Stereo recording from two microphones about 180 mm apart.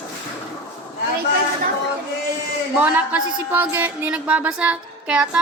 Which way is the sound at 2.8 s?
10° right (ahead or behind).